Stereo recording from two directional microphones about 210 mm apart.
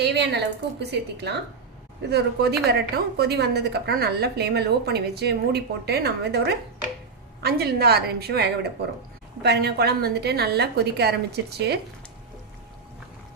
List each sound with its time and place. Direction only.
0.0 s a woman's voice: 55° right (ahead or behind)